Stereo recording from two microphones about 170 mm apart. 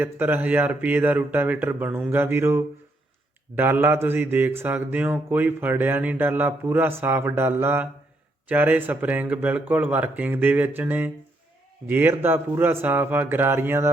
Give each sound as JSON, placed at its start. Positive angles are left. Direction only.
{"t": 0.0, "sound": "speech", "side_deg": -10}